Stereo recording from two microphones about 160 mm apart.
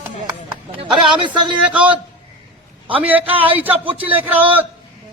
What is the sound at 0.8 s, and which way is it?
Speech, 30° right (ahead or behind).